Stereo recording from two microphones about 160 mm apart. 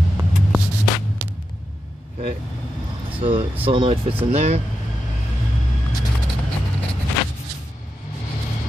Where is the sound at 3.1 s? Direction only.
35° right (ahead or behind).